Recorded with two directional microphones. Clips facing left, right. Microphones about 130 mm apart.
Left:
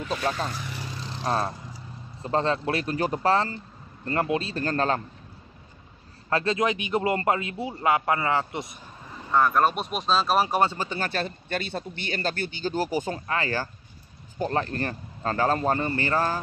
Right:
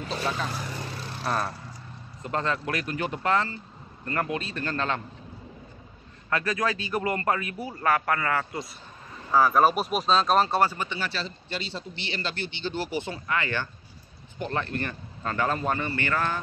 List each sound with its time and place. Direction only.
0.1 s a man's voice: 40° left (ahead or behind)
1.2 s a man's voice: 30° left (ahead or behind)
6.3 s a man's voice: 25° left (ahead or behind)
9.3 s speech: centre (ahead or behind)
10.6 s a man's voice: 25° left (ahead or behind)
10.9 s a man's voice: 50° left (ahead or behind)